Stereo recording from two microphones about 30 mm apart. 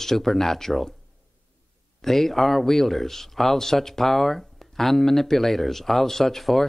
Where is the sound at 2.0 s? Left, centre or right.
Centre.